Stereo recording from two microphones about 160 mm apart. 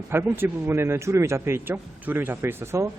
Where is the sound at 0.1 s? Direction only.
15° right (ahead or behind).